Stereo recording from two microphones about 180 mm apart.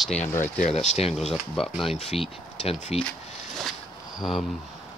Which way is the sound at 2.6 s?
35° left (ahead or behind).